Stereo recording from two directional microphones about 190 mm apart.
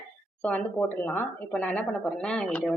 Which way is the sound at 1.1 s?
10° left (ahead or behind).